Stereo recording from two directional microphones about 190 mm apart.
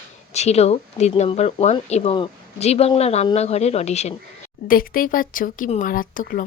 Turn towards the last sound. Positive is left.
turn(degrees=45)  # may be behind; listen again after turning